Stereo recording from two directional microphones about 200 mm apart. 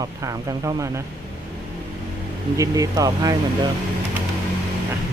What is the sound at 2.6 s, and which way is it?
Speech, 15° right (ahead or behind).